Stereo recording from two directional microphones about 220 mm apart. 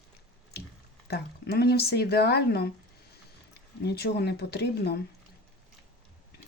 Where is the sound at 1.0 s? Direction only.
45° left (ahead or behind).